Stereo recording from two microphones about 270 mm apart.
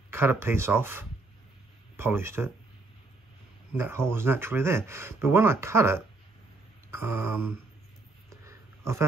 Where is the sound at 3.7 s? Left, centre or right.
Centre.